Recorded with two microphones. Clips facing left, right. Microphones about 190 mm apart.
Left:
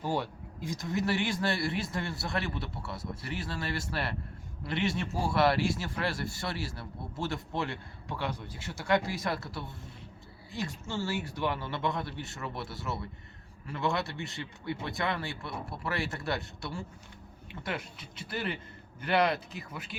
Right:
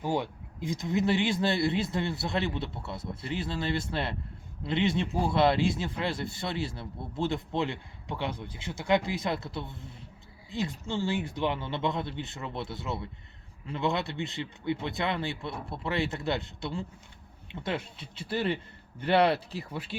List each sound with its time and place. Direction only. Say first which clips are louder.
0.0 s a man's voice: right 2 dB; 15° right (ahead or behind); by 20.0 s 30° right (ahead or behind)